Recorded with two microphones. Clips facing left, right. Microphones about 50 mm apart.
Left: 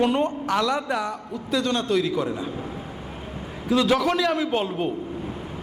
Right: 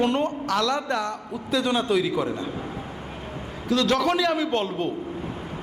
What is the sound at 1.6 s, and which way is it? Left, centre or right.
Speech, centre.